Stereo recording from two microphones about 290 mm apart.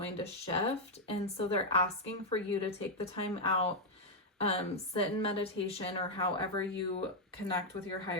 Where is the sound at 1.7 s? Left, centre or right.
Centre.